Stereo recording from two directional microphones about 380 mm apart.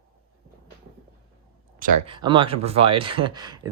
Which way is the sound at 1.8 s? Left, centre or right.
Centre.